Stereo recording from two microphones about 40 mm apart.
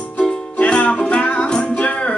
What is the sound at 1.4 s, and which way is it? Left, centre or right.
Music, centre.